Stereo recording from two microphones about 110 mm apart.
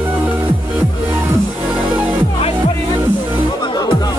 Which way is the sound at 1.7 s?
10° right (ahead or behind).